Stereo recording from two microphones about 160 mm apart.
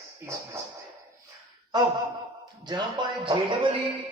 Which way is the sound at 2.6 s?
25° right (ahead or behind).